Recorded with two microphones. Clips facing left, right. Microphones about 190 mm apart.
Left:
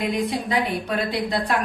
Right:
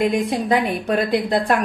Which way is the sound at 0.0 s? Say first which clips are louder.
Right 5 dB; 50° right (ahead or behind).